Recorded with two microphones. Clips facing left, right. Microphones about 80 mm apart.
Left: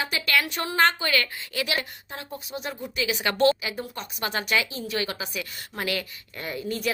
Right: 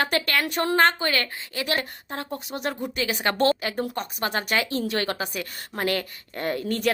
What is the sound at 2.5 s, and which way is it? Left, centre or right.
Speech, right.